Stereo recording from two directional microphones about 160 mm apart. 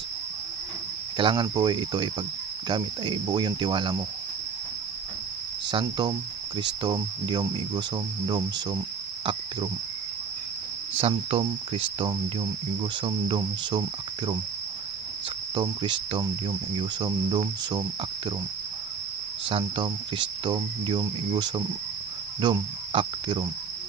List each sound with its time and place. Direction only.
1.1 s cricket: 30° right (ahead or behind)
5.7 s cricket: 25° right (ahead or behind)
9.2 s speech: 30° right (ahead or behind)
11.0 s speech: 40° right (ahead or behind)
13.0 s cricket: 30° right (ahead or behind)
15.5 s cricket: 30° right (ahead or behind)
19.5 s cricket: 30° right (ahead or behind)